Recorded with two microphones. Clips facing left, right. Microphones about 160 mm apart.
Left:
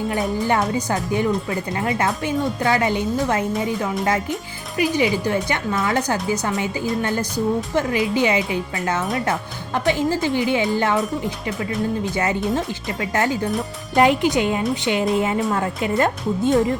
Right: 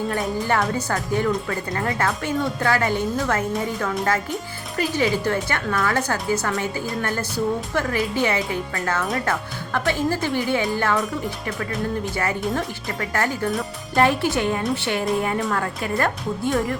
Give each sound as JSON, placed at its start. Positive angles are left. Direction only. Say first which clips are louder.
{"t": 0.4, "sound": "speech", "louder": "left 2 dB", "side_deg": 15}
{"t": 12.1, "sound": "speech", "louder": "left 3 dB", "side_deg": 20}